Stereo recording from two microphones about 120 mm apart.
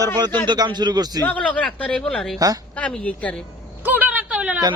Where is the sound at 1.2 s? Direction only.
10° left (ahead or behind).